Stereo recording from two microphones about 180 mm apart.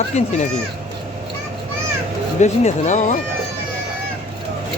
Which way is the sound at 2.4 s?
40° left (ahead or behind).